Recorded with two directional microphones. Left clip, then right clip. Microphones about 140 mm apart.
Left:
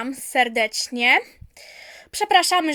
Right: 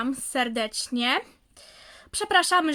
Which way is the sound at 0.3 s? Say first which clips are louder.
Left 8 dB; 10° left (ahead or behind).